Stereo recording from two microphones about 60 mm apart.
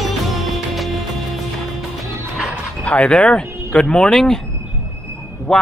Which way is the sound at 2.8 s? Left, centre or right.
Centre.